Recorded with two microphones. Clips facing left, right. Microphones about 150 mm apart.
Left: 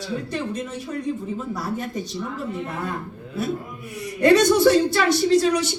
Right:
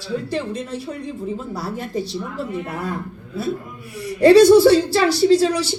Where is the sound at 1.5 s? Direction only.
35° right (ahead or behind).